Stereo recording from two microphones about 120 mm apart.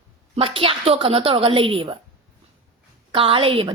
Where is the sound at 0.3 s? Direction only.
50° right (ahead or behind).